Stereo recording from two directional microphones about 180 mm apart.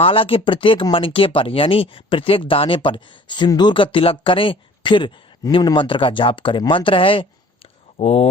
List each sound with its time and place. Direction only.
0.0 s speech: 30° left (ahead or behind)